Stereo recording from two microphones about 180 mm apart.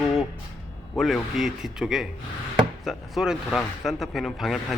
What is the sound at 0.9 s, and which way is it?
Speech, centre (ahead or behind).